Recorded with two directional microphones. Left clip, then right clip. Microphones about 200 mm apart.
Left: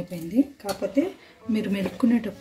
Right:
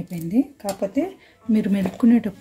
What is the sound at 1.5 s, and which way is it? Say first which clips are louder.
Speech: right 4 dB; 50° right (ahead or behind).